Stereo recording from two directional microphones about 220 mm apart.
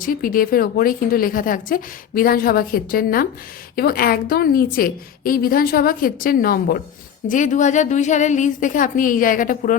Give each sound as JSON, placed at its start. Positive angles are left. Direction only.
{"t": 0.0, "sound": "a woman's voice", "side_deg": 40}